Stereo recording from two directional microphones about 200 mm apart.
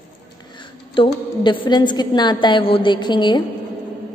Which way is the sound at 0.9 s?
25° left (ahead or behind).